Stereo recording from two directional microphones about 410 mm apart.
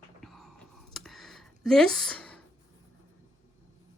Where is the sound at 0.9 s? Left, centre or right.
Centre.